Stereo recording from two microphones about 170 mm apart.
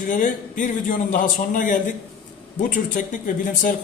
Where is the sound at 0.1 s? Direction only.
50° left (ahead or behind).